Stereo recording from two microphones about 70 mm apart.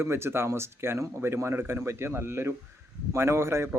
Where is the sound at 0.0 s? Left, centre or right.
Right.